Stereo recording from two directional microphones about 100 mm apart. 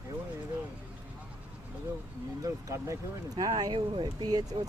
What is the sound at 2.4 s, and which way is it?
Speech, 30° right (ahead or behind).